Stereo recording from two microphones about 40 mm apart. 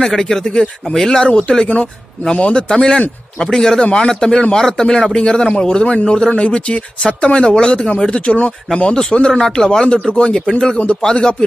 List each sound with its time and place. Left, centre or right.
0.0 s speech: centre